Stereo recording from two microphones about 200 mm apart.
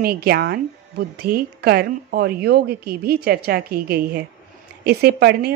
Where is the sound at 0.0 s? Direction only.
50° right (ahead or behind).